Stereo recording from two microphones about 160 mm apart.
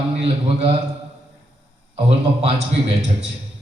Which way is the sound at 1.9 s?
40° right (ahead or behind).